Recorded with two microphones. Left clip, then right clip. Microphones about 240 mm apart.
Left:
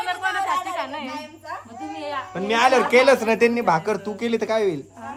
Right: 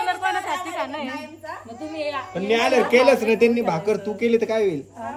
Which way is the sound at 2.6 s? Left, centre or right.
Centre.